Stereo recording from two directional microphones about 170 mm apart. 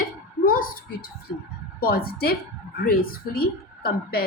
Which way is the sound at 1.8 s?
60° left (ahead or behind).